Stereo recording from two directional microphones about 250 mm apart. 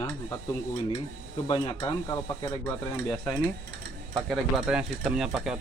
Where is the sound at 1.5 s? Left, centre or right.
Centre.